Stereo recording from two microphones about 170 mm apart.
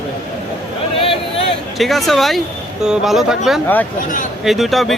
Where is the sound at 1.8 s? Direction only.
Centre (ahead or behind).